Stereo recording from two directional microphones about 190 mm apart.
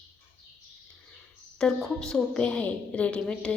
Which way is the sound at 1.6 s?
5° left (ahead or behind).